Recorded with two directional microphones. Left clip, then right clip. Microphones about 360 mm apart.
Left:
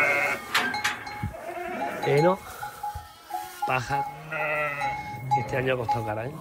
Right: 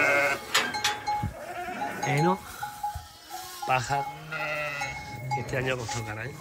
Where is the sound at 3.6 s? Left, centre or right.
Centre.